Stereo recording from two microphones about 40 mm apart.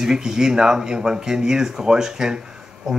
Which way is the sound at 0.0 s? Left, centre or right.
Centre.